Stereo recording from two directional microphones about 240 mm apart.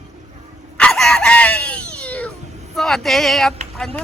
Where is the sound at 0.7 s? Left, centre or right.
Centre.